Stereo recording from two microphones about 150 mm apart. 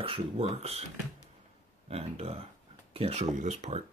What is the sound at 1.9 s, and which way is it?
Speech, 40° right (ahead or behind).